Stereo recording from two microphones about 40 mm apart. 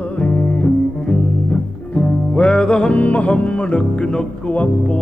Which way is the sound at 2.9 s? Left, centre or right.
Left.